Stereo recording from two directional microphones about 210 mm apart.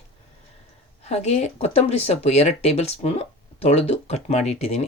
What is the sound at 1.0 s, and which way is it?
Speech, 30° left (ahead or behind).